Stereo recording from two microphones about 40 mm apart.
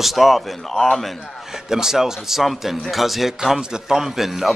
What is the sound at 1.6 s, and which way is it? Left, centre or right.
Speech, centre.